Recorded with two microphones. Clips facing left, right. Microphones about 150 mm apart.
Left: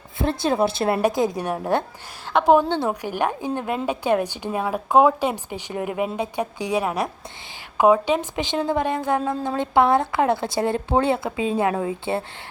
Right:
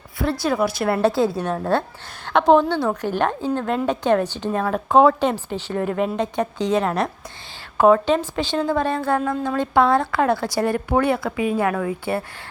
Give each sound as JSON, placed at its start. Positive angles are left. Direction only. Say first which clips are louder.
{"t": 0.2, "sound": "a woman's voice", "louder": "even", "side_deg": 25}
{"t": 2.6, "sound": "a woman's voice", "louder": "right 2 dB", "side_deg": 20}